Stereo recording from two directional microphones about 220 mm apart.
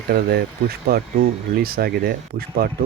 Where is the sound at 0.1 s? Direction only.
45° right (ahead or behind).